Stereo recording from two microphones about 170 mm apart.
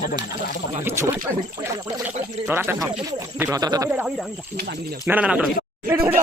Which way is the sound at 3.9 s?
5° right (ahead or behind).